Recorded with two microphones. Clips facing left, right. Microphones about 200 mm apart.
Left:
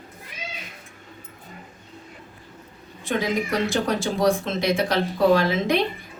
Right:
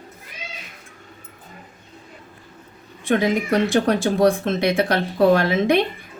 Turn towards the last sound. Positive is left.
turn(degrees=-55)  # may be behind; listen again after turning